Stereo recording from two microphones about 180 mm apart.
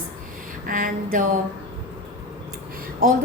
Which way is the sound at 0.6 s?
50° right (ahead or behind).